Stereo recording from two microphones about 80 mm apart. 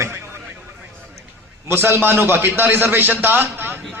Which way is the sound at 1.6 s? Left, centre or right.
Right.